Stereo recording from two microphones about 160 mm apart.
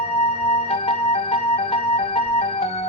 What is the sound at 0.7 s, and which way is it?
Music, 40° left (ahead or behind).